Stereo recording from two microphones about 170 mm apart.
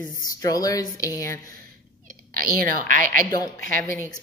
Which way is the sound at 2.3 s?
55° right (ahead or behind).